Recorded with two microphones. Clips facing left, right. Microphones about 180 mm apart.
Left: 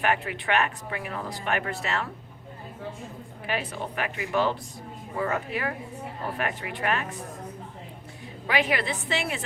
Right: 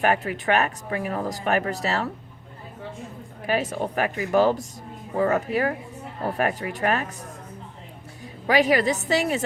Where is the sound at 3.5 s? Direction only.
45° right (ahead or behind).